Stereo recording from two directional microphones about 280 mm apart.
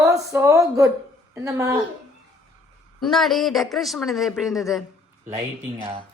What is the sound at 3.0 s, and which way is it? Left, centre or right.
Speech, centre.